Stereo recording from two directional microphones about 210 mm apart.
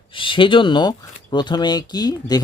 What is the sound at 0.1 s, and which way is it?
Speech, 25° left (ahead or behind).